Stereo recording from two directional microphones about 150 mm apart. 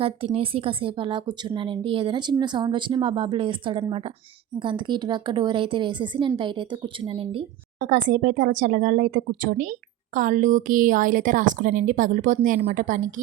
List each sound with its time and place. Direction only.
0.0 s speech: 40° right (ahead or behind)
7.8 s speech: 65° right (ahead or behind)